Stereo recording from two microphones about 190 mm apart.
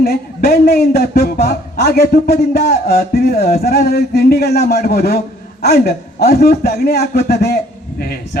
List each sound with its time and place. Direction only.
0.0 s a man's voice: 50° left (ahead or behind)